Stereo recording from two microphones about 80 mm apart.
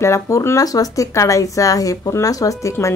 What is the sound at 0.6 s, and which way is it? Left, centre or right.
Speech, left.